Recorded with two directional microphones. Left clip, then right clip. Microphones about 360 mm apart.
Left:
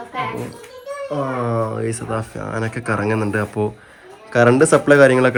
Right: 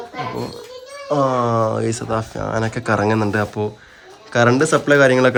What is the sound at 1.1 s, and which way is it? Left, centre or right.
Speech, centre.